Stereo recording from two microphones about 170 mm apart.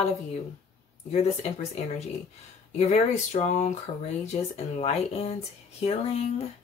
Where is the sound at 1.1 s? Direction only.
40° left (ahead or behind).